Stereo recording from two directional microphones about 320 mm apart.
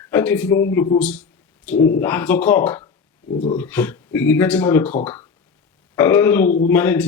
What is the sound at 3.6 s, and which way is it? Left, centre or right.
Speech, centre.